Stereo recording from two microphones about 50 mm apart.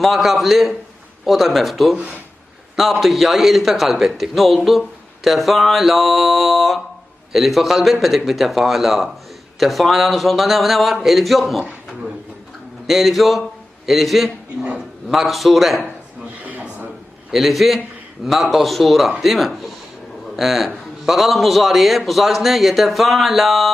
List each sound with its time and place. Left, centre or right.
0.0 s a man's voice: centre
3.0 s a man's voice: centre
12.9 s a man's voice: centre
16.4 s a sound: right
17.3 s a man's voice: centre